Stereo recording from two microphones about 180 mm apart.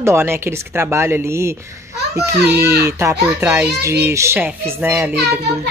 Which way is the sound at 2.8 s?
15° right (ahead or behind).